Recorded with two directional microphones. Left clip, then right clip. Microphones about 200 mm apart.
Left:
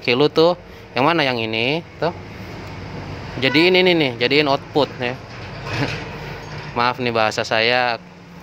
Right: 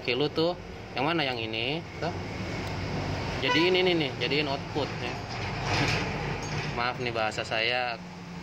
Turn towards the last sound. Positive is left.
turn(degrees=50)  # may be behind; listen again after turning